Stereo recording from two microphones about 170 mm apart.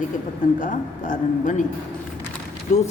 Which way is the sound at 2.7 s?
45° left (ahead or behind).